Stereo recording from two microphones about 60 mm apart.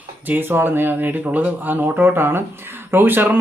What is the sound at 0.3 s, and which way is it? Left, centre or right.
Speech, right.